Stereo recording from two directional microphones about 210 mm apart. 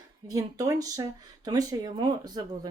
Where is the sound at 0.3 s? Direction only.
15° right (ahead or behind).